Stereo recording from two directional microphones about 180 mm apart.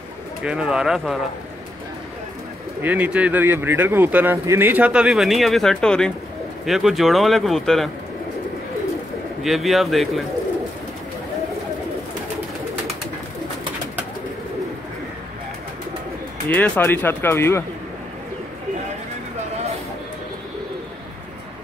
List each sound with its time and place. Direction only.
0.4 s speech: 5° right (ahead or behind)
2.8 s speech: 10° right (ahead or behind)
9.4 s speech: centre (ahead or behind)
16.4 s speech: 10° left (ahead or behind)